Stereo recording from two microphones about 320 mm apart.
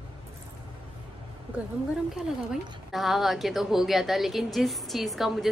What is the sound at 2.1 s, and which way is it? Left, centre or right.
A woman's voice, centre.